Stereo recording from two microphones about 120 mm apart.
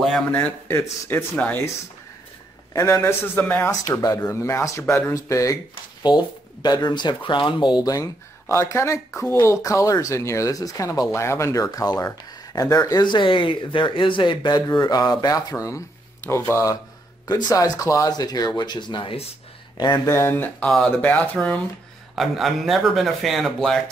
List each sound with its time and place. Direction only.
0.0 s a man's voice: 5° left (ahead or behind)
0.7 s speech: 25° left (ahead or behind)
1.3 s speech: 15° left (ahead or behind)
2.7 s speech: 30° left (ahead or behind)
3.1 s speech: 15° left (ahead or behind); by 19.3 s 55° left (ahead or behind)
20.1 s speech: 20° left (ahead or behind)
20.6 s speech: 5° left (ahead or behind)
22.1 s speech: centre (ahead or behind)